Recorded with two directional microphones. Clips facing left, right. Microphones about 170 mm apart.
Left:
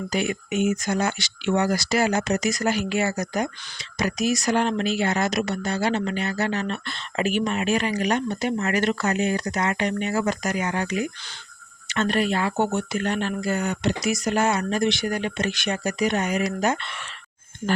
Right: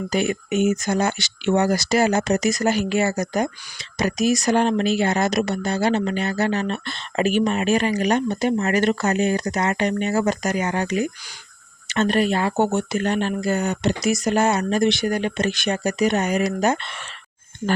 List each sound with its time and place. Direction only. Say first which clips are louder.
0.1 s speech: right 4 dB; 40° right (ahead or behind); by 12.8 s 25° right (ahead or behind)
12.9 s speech: right 3 dB; 40° right (ahead or behind)